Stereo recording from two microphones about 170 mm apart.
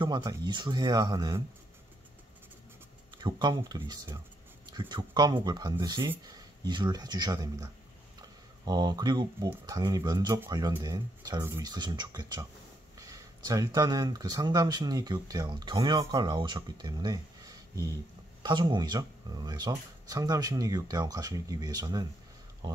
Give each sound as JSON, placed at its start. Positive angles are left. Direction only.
{"t": 0.0, "sound": "speech", "side_deg": -25}
{"t": 3.2, "sound": "speech", "side_deg": -25}